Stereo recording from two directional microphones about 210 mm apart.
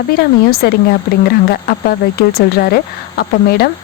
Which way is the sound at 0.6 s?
50° left (ahead or behind).